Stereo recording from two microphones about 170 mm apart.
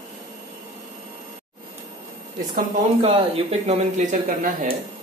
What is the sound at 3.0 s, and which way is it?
Speech, 35° right (ahead or behind).